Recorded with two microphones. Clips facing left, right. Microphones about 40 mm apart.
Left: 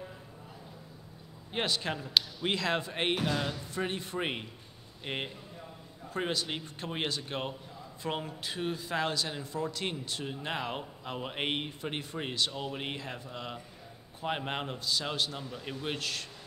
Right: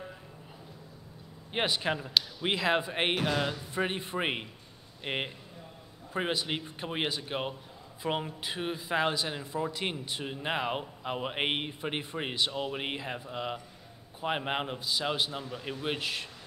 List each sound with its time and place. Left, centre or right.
1.5 s a man's voice: centre